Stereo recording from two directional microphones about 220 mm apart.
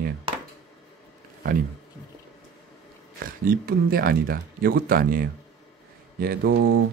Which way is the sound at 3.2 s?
40° right (ahead or behind).